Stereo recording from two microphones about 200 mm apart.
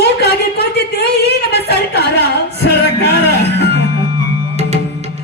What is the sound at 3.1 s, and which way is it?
Music, 55° left (ahead or behind).